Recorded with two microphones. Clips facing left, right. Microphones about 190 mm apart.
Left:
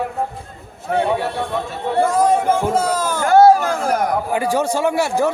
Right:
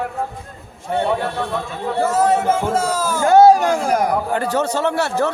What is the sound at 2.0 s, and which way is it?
Speech, 5° right (ahead or behind).